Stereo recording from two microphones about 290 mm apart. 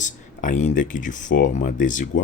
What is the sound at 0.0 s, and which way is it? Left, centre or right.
Speech, left.